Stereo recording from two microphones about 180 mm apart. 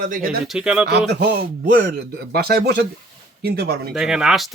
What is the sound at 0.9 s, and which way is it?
Speech, 65° right (ahead or behind).